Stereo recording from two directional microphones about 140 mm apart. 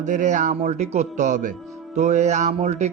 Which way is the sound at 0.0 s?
60° right (ahead or behind).